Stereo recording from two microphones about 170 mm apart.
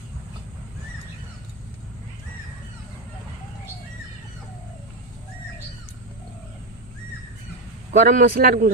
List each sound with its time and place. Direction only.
7.9 s a man's voice: 50° right (ahead or behind)